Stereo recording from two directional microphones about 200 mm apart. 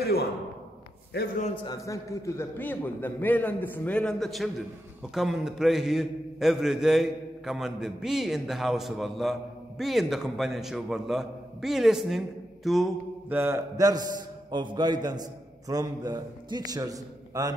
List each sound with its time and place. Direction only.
0.0 s a sound: 50° left (ahead or behind)
1.1 s a man's voice: 50° left (ahead or behind)
1.6 s a man's voice: 20° left (ahead or behind); by 12.2 s centre (ahead or behind)
12.6 s mantra: centre (ahead or behind)
13.4 s a man's voice: 15° right (ahead or behind)